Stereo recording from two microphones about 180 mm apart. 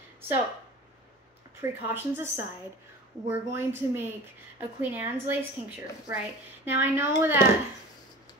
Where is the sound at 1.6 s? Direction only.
10° right (ahead or behind).